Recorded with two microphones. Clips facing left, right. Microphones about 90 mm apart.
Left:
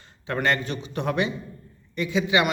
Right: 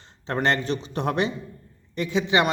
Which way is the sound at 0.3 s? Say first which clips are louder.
Right 1 dB; 35° right (ahead or behind).